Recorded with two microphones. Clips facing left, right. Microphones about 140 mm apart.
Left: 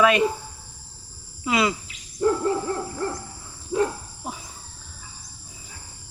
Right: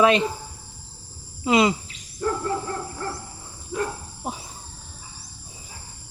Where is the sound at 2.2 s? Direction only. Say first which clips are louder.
Left 5 dB; 25° left (ahead or behind).